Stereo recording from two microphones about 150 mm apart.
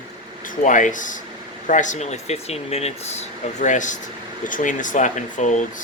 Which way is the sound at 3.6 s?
55° left (ahead or behind).